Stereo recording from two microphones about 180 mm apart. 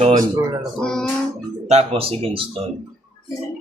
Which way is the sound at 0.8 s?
5° left (ahead or behind).